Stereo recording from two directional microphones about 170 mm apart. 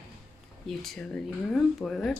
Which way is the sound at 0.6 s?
Centre (ahead or behind).